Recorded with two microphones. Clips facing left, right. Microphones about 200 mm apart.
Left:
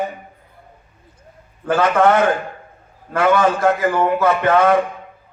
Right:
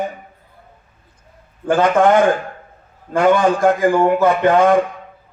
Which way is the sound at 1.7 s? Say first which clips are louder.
Right 2 dB; 20° right (ahead or behind).